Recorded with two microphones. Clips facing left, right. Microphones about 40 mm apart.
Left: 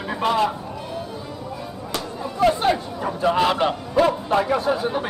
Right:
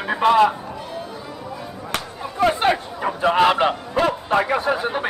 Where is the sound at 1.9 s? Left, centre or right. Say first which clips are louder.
Right 1 dB; right.